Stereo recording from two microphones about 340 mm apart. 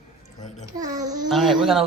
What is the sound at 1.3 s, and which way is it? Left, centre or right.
Speech, centre.